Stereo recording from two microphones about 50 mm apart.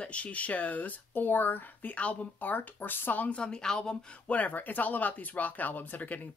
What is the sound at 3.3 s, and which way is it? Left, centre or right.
Speech, centre.